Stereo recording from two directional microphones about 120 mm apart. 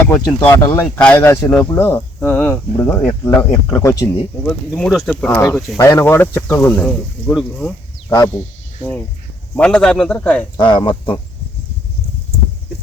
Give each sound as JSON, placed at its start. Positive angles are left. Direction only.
{"t": 0.1, "sound": "speech", "side_deg": 25}
{"t": 4.4, "sound": "speech", "side_deg": 5}
{"t": 5.0, "sound": "speech", "side_deg": 15}
{"t": 5.5, "sound": "speech", "side_deg": 0}
{"t": 5.7, "sound": "speech", "side_deg": 25}
{"t": 6.8, "sound": "speech", "side_deg": 0}
{"t": 8.8, "sound": "speech", "side_deg": 15}
{"t": 10.6, "sound": "speech", "side_deg": 40}